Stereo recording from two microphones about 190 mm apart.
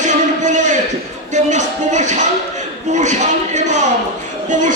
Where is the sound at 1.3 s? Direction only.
40° right (ahead or behind).